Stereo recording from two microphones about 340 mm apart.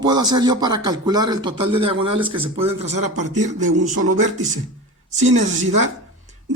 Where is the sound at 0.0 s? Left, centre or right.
Centre.